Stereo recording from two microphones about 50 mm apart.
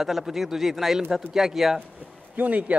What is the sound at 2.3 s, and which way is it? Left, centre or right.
Speech, right.